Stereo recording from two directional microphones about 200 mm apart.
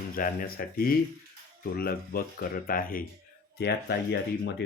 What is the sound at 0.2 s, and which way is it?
Speech, 45° left (ahead or behind).